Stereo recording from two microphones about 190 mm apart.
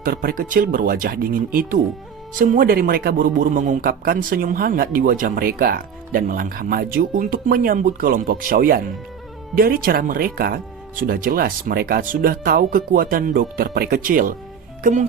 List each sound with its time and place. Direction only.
0.0 s speech: 50° right (ahead or behind)